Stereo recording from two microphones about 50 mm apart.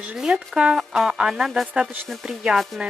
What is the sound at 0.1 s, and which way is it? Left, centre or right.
Speech, centre.